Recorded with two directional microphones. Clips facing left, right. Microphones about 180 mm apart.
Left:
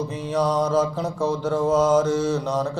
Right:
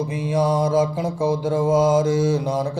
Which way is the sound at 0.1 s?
10° right (ahead or behind).